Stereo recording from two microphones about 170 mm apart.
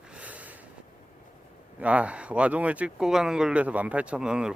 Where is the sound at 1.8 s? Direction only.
5° right (ahead or behind).